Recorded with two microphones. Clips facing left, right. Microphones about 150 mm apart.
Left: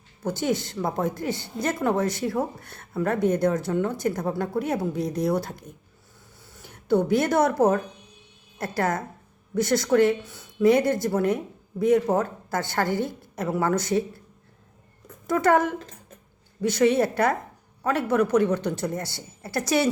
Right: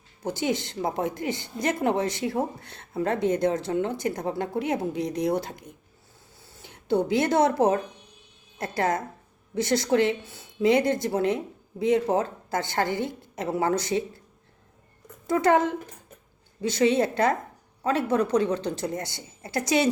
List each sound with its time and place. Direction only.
0.2 s speech: 20° right (ahead or behind)
6.4 s a sound: 25° right (ahead or behind)
7.3 s a woman's voice: 25° right (ahead or behind)
15.4 s speech: 20° right (ahead or behind)
16.6 s a woman's voice: 55° left (ahead or behind)
16.9 s speech: 25° right (ahead or behind)
18.2 s a woman's voice: 55° left (ahead or behind)
18.9 s speech: 20° right (ahead or behind)